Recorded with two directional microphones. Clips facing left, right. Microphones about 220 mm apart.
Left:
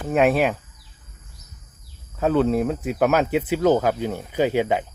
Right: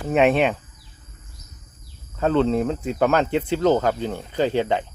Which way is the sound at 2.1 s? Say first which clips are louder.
Even; 5° left (ahead or behind).